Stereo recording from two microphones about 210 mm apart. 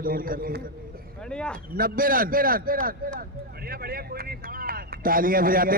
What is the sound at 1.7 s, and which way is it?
A man's voice, 45° right (ahead or behind).